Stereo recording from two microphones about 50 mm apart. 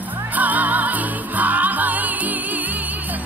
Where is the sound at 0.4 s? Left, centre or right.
Right.